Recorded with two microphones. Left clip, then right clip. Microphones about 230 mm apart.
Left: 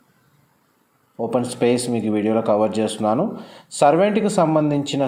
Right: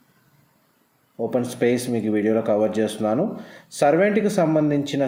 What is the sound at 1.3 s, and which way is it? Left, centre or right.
Speech, centre.